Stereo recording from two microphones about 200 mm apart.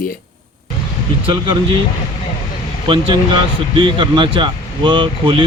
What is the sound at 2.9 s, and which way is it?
Speech, 25° right (ahead or behind).